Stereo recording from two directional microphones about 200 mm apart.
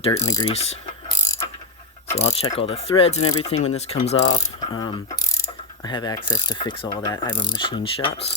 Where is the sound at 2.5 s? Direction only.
30° left (ahead or behind).